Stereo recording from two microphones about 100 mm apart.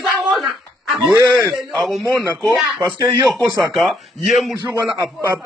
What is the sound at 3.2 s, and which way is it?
Speech, centre (ahead or behind).